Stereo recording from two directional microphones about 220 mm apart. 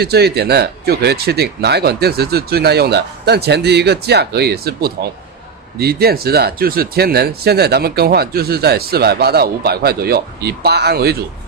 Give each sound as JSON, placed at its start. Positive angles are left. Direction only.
{"t": 0.0, "sound": "speech", "side_deg": -45}